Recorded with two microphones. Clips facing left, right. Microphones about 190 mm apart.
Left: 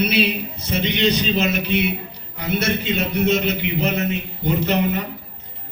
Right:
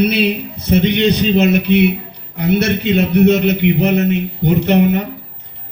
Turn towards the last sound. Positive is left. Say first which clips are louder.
# right 7 dB
turn(degrees=-60)  # may be behind; listen again after turning